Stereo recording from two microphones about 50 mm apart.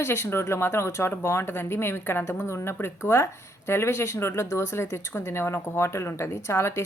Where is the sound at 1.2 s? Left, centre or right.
Left.